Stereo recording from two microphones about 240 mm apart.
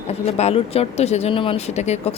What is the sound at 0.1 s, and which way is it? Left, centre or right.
Speech, left.